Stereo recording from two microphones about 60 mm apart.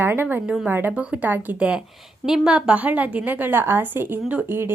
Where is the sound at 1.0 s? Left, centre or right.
Centre.